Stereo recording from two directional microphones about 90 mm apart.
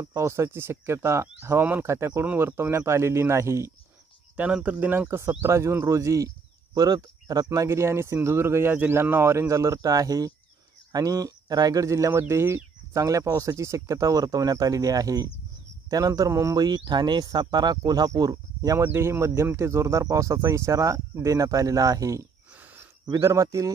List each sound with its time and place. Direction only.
0.0 s speech: 35° right (ahead or behind)
4.4 s speech: 15° right (ahead or behind); by 16.5 s 35° right (ahead or behind)
16.5 s speech: 50° right (ahead or behind)
18.8 s speech: 25° right (ahead or behind)